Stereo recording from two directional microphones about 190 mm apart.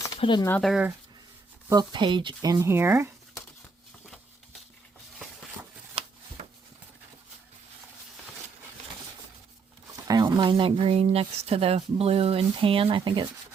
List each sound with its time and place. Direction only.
0.2 s speech: 25° left (ahead or behind)
0.4 s speech: 10° left (ahead or behind)
0.7 s speech: 5° right (ahead or behind)
1.7 s speech: 20° right (ahead or behind)
5.9 s shuffling cards: 30° right (ahead or behind)
10.1 s speech: 20° right (ahead or behind)